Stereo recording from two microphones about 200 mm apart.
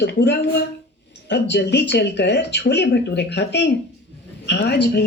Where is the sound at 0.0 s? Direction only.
55° left (ahead or behind).